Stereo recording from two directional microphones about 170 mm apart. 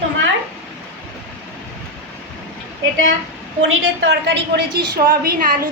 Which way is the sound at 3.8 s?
90° right.